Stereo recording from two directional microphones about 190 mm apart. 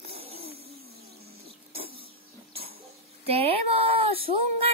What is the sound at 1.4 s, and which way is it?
Printer, 30° right (ahead or behind).